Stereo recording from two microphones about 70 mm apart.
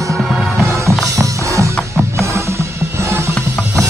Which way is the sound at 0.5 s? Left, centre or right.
Right.